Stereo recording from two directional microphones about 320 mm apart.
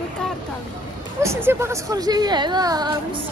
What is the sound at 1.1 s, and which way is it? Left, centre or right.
Speech, centre.